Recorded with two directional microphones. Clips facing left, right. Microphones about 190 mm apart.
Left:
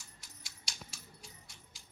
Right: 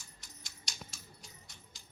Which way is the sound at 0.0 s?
10° left (ahead or behind).